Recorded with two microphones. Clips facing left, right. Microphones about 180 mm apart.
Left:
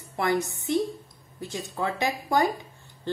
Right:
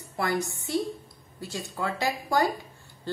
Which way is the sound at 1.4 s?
20° left (ahead or behind).